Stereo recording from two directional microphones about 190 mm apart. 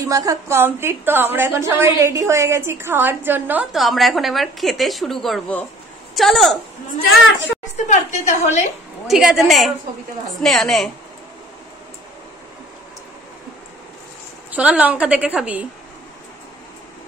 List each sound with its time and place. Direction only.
0.0 s a woman's voice: 20° right (ahead or behind); by 6.6 s centre (ahead or behind)
7.7 s a woman's voice: 40° left (ahead or behind)
9.0 s a woman's voice: centre (ahead or behind)
14.5 s a woman's voice: 5° right (ahead or behind)